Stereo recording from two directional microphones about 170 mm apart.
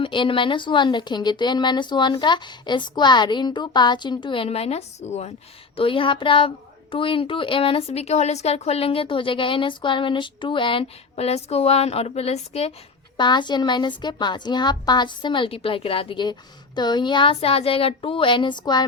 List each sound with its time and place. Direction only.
0.0 s speech: 30° left (ahead or behind)
13.1 s speech: 25° left (ahead or behind)